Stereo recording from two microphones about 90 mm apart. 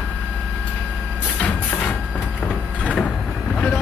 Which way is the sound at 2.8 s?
15° left (ahead or behind).